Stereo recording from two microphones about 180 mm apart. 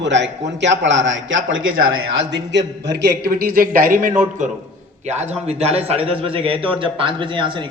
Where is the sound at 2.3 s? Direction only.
80° right.